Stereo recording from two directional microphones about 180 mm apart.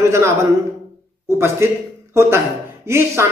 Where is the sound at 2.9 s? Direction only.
15° right (ahead or behind).